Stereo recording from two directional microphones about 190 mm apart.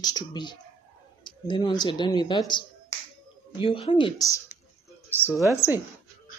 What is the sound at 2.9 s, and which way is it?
Finger snapping, 15° left (ahead or behind).